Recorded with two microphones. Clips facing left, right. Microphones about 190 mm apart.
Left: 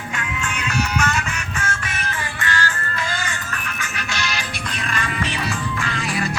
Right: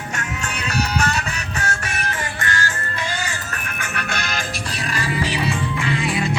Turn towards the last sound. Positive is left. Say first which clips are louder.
# right 3 dB
turn(degrees=-30)  # may be behind; listen again after turning